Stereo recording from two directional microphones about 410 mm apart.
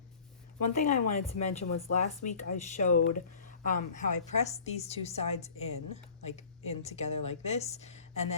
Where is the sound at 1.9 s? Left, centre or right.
Centre.